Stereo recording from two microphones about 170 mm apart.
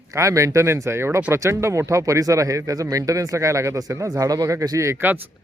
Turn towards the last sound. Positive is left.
turn(degrees=-10)  # may be behind; listen again after turning